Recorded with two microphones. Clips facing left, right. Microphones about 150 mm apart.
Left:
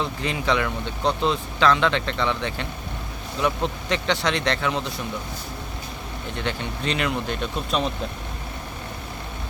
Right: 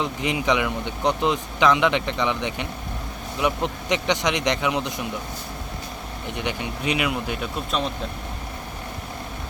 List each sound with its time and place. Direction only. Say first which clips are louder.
0.0 s speech: right 2 dB; 15° right (ahead or behind)
6.3 s speech: even; 15° right (ahead or behind)